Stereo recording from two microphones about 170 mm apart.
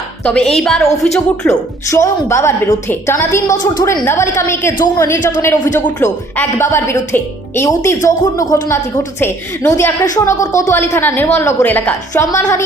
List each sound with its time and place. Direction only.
0.3 s a woman's voice: 5° left (ahead or behind)
1.5 s a woman's voice: 15° left (ahead or behind)